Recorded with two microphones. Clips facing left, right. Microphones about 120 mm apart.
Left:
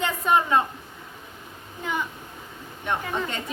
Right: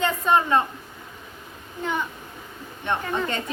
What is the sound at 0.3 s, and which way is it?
Speech, 5° left (ahead or behind).